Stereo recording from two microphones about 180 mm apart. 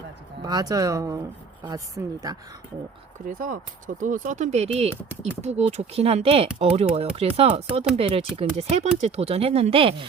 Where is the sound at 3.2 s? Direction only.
50° right (ahead or behind).